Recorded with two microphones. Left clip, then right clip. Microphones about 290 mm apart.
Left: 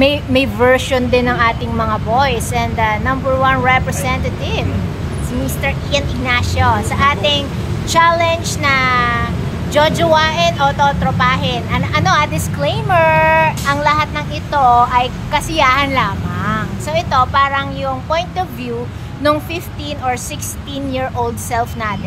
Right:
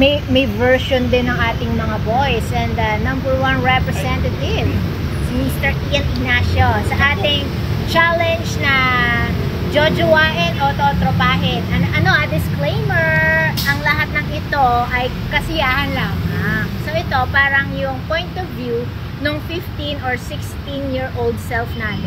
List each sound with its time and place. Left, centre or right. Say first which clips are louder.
0.3 s speech: left 2 dB; centre
2.1 s speech: left 3 dB; centre
5.6 s speech: left 2 dB; centre
12.9 s speech: left 5 dB; left
13.7 s speech: left 3 dB; centre